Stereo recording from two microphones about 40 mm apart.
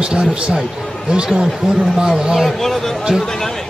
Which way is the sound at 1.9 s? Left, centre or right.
Centre.